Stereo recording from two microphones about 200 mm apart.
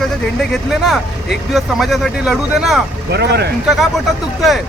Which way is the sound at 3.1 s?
55° right (ahead or behind).